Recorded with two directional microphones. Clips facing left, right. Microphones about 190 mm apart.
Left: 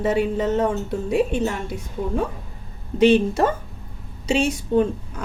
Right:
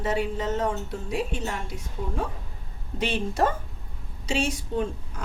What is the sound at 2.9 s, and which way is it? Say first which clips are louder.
A woman's voice: left 10 dB; 75° left (ahead or behind).